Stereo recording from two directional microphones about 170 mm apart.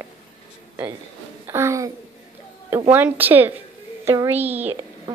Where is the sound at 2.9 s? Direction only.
10° right (ahead or behind).